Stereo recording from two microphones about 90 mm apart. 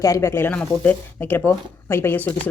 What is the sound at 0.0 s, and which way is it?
Speech, 35° left (ahead or behind).